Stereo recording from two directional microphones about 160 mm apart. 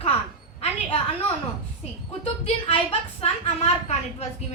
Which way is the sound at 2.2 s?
35° left (ahead or behind).